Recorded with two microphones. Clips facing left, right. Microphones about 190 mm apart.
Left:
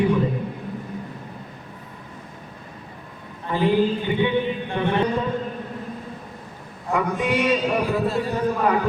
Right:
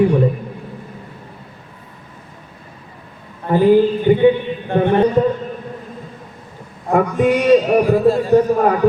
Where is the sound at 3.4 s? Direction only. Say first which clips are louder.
Right 8 dB; 45° right (ahead or behind).